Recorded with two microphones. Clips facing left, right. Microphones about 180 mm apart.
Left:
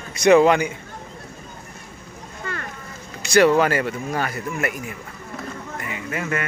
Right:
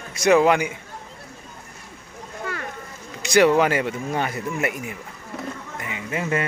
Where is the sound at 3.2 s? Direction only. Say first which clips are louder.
Left 1 dB; 15° right (ahead or behind).